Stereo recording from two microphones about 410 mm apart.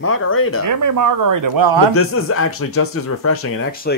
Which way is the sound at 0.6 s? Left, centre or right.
Right.